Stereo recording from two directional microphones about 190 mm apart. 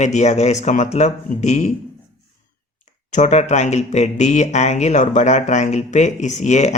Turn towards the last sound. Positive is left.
turn(degrees=40)  # may be behind; listen again after turning